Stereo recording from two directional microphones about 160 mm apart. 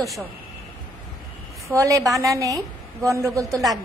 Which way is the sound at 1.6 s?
20° right (ahead or behind).